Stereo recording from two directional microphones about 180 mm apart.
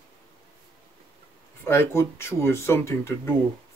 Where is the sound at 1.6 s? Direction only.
15° left (ahead or behind).